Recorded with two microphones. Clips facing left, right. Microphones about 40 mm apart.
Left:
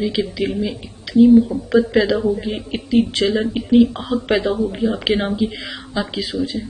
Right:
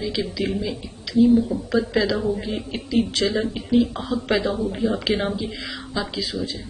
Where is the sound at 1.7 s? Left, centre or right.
Left.